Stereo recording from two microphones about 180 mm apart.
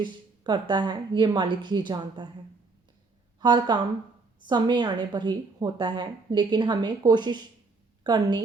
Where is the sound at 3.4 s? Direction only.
25° right (ahead or behind).